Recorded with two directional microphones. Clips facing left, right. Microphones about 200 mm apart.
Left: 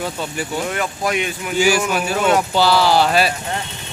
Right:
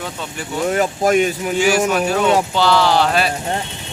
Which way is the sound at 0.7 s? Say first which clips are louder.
Right 6 dB; 40° right (ahead or behind).